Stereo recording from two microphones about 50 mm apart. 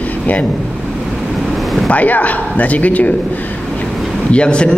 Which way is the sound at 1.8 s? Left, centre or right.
Left.